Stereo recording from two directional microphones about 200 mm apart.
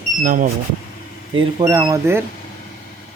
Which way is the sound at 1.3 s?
20° right (ahead or behind).